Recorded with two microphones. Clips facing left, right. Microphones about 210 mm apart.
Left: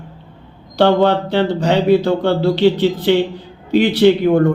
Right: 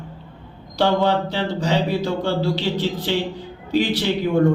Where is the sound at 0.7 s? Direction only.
60° left (ahead or behind).